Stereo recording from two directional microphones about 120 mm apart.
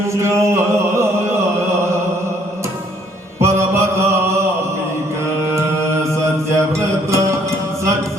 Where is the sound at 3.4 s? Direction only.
25° right (ahead or behind).